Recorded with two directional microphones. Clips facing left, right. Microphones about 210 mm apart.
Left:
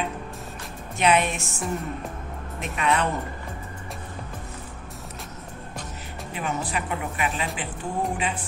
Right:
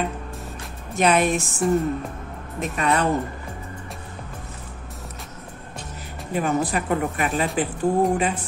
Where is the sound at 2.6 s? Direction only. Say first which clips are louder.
Right 3 dB; 40° right (ahead or behind).